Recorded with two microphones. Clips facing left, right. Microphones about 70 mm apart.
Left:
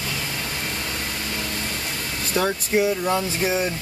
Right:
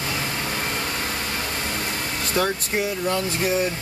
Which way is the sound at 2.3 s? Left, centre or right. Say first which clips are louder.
Left 2 dB; centre.